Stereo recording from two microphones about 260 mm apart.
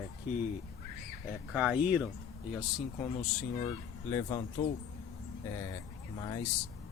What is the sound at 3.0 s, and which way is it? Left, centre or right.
Speech, centre.